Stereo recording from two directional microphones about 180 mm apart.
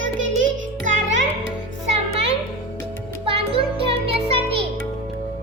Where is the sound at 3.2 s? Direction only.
30° right (ahead or behind).